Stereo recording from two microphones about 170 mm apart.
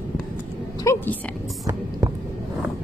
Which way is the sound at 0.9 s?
15° left (ahead or behind).